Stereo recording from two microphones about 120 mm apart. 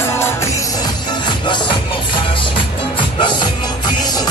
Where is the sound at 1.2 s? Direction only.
40° left (ahead or behind).